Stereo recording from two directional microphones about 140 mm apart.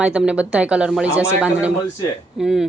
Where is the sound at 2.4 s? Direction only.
Centre (ahead or behind).